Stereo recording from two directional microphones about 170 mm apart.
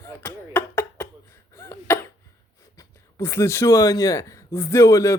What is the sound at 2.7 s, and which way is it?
Speech, 15° left (ahead or behind).